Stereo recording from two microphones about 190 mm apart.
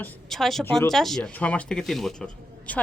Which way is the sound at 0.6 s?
10° left (ahead or behind).